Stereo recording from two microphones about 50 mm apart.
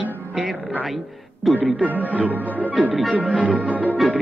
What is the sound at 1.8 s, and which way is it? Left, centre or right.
Speech, right.